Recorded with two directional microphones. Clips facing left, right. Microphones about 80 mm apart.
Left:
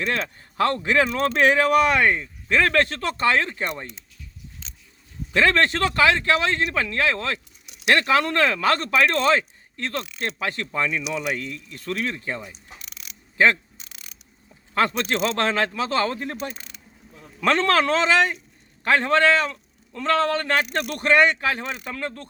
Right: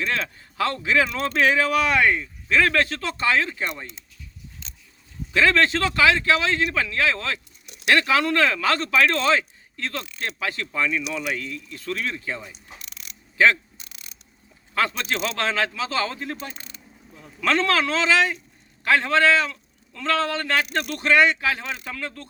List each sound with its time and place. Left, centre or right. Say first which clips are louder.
0.1 s speech: left 1 dB; left
5.3 s speech: even; left
7.2 s speech: left 2 dB; left
7.9 s speech: even; left
14.8 s speech: left 3 dB; left
15.1 s speech: left 3 dB; left
15.4 s speech: left 2 dB; left
17.4 s speech: left 2 dB; left
21.7 s speech: left 1 dB; centre
21.9 s speech: left 3 dB; left